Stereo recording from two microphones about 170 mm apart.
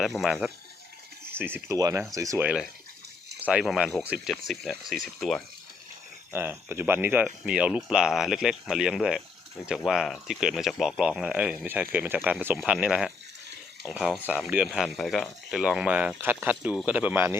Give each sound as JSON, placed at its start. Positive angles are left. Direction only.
{"t": 0.0, "sound": "speech", "side_deg": 0}
{"t": 1.3, "sound": "speech", "side_deg": -10}
{"t": 3.4, "sound": "speech", "side_deg": -5}
{"t": 6.3, "sound": "speech", "side_deg": -15}